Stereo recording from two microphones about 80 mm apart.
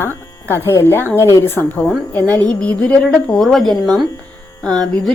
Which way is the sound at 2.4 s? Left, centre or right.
Centre.